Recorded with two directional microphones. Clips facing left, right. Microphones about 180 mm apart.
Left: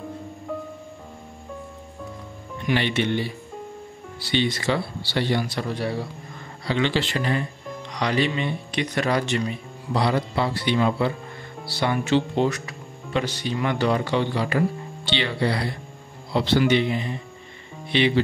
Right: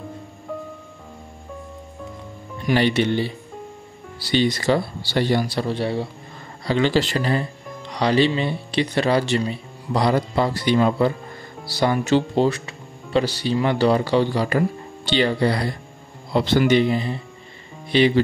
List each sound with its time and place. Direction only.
2.6 s speech: 40° right (ahead or behind)
6.6 s speech: 40° right (ahead or behind)